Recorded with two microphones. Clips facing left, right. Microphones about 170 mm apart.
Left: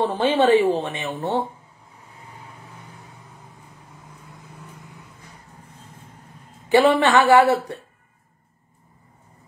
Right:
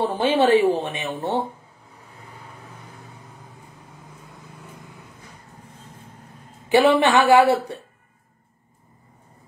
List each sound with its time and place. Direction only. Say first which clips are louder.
0.0 s a woman's voice: even; 10° right (ahead or behind)
6.7 s a woman's voice: even; 10° right (ahead or behind)